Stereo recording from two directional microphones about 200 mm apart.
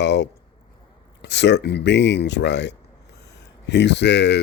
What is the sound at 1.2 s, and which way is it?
Speech, 60° left (ahead or behind).